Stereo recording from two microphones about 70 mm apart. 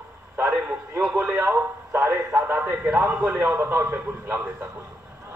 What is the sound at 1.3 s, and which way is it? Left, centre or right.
A man's voice, right.